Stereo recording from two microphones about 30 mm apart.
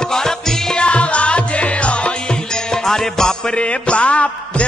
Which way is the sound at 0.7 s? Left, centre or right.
Left.